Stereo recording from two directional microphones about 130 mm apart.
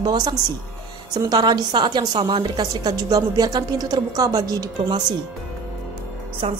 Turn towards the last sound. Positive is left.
turn(degrees=-50)  # may be behind; listen again after turning